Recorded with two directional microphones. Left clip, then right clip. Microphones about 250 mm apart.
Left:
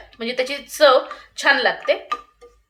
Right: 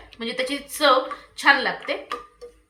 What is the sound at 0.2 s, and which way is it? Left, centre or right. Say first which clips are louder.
Speech: left 3 dB; left.